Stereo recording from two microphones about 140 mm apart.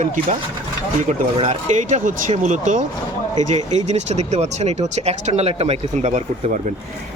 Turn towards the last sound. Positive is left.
turn(degrees=-60)  # may be behind; listen again after turning